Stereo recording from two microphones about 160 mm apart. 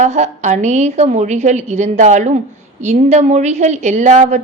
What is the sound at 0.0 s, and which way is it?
A woman's voice, 45° right (ahead or behind).